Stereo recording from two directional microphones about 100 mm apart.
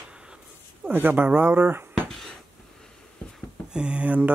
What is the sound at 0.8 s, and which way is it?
Speech, 20° right (ahead or behind).